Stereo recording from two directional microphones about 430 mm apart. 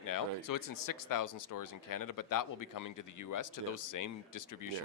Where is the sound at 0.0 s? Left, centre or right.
Left.